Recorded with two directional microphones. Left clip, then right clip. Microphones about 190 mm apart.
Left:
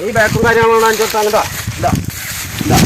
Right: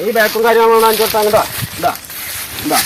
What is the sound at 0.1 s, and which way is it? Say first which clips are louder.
Speech: even; centre (ahead or behind).